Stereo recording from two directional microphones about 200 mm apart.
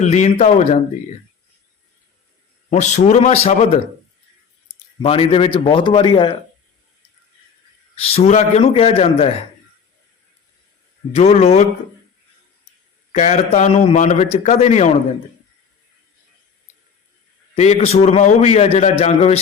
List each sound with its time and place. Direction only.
0.0 s a man's voice: 35° left (ahead or behind)
2.6 s a man's voice: 35° left (ahead or behind)
5.0 s a man's voice: 30° left (ahead or behind)
7.9 s a man's voice: 30° left (ahead or behind)
11.1 s a man's voice: 30° left (ahead or behind)
13.1 s a man's voice: 35° left (ahead or behind)
17.5 s a man's voice: 30° left (ahead or behind)